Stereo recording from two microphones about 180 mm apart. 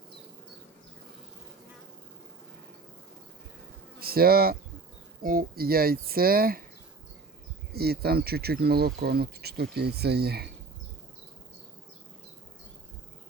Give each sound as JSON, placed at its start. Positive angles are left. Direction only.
{"t": 4.0, "sound": "speech", "side_deg": -55}
{"t": 7.7, "sound": "speech", "side_deg": -60}